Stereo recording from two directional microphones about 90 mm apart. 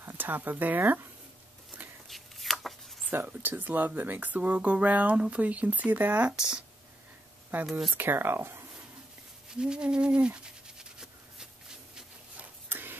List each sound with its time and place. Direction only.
0.0 s speech: 25° right (ahead or behind)
2.0 s shuffling cards: centre (ahead or behind)
3.1 s speech: 20° right (ahead or behind)
7.9 s speech: 25° right (ahead or behind)
9.5 s a sound: 10° right (ahead or behind)
12.6 s a sound: 20° right (ahead or behind)